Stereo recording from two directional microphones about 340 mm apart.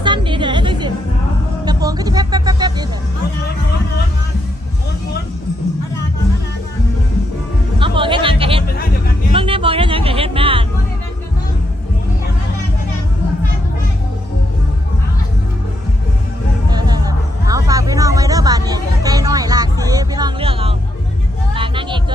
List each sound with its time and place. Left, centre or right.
0.0 s music: centre
1.6 s vehicle: centre
7.8 s music: centre
16.6 s music: centre
21.5 s vehicle: centre